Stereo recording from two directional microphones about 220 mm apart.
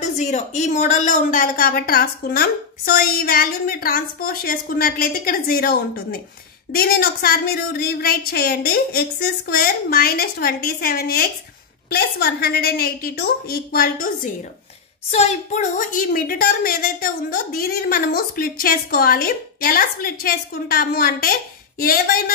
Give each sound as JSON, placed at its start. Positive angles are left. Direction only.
{"t": 0.0, "sound": "a woman's voice", "side_deg": 35}
{"t": 15.0, "sound": "a woman's voice", "side_deg": 30}